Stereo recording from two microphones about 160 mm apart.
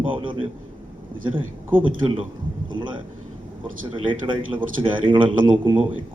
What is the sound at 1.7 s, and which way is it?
Speech, 35° right (ahead or behind).